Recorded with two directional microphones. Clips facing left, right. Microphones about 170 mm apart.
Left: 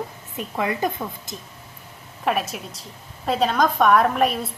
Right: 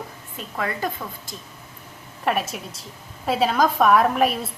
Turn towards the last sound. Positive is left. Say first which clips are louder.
# even
turn(degrees=0)  # may be behind; listen again after turning